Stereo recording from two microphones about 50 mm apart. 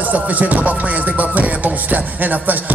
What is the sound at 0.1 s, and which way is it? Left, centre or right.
Music, right.